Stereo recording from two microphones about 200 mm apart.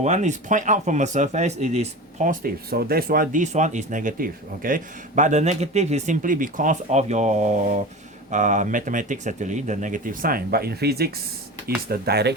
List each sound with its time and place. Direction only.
0.0 s speech: 35° right (ahead or behind); by 12.3 s 55° right (ahead or behind)